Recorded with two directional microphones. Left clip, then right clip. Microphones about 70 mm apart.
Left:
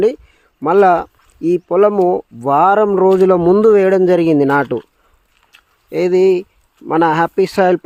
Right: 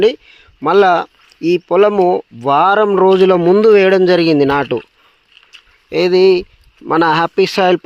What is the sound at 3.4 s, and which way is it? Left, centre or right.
Speech, left.